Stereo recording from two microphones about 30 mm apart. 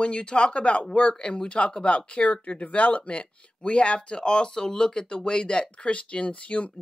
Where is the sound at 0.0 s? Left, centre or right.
Left.